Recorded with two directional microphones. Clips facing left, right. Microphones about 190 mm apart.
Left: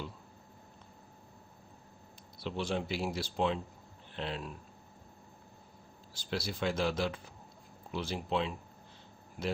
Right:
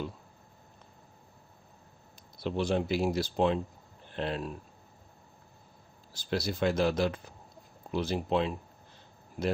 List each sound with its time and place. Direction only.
2.4 s speech: 40° right (ahead or behind)
6.1 s speech: 45° right (ahead or behind)